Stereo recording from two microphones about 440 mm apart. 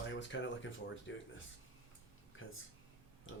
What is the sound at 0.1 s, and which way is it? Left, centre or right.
Speech, left.